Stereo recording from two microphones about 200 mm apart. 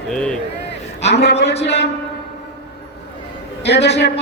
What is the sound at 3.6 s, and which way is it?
Speech, 60° left (ahead or behind).